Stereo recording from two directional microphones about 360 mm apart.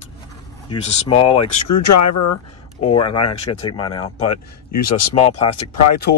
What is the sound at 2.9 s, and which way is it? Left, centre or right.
Speech, centre.